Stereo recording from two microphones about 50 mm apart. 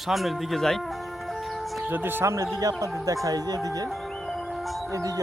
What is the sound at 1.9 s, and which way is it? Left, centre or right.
Speech, right.